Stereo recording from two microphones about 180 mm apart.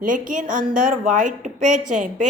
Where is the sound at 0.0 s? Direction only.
45° right (ahead or behind).